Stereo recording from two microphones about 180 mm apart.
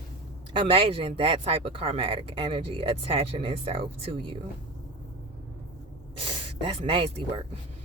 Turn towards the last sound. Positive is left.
turn(degrees=-30)  # may be behind; listen again after turning